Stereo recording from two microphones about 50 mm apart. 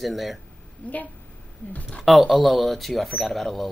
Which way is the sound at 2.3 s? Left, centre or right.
Centre.